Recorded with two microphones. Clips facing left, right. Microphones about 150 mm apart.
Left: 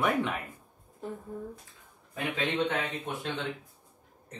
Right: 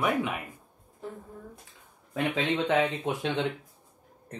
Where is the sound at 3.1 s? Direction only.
90° right.